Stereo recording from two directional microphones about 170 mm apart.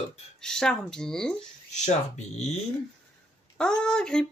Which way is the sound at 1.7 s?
40° left (ahead or behind).